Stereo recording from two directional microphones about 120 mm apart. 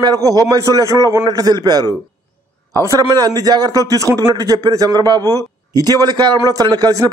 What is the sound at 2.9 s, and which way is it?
A man's voice, 30° right (ahead or behind).